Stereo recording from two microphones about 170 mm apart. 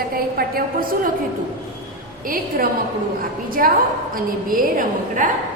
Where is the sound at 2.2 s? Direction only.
55° right (ahead or behind).